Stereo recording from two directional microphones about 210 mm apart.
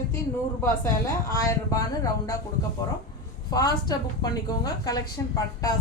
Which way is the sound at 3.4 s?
15° left (ahead or behind).